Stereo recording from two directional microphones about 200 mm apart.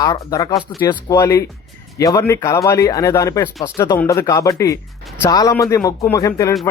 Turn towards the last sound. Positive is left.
turn(degrees=15)  # may be behind; listen again after turning